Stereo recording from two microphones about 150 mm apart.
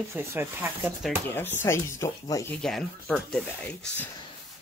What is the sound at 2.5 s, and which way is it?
Speech, 5° left (ahead or behind).